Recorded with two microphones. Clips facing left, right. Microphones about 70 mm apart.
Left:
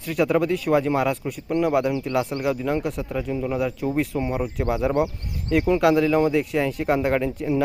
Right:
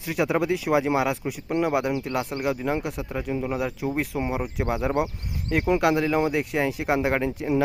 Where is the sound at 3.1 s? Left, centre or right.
Centre.